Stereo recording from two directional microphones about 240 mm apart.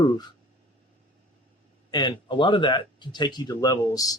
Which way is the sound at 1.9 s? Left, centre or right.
Centre.